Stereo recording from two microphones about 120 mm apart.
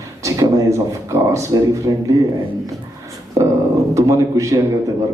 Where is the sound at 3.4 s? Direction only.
30° right (ahead or behind).